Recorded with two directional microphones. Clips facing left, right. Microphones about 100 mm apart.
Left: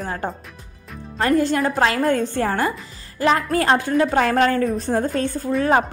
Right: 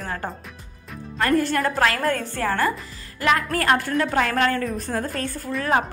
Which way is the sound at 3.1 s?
30° left (ahead or behind).